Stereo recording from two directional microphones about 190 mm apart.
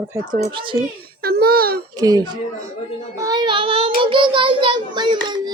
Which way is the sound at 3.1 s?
20° right (ahead or behind).